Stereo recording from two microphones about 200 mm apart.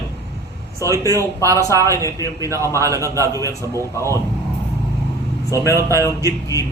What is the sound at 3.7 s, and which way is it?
Speech, 15° left (ahead or behind).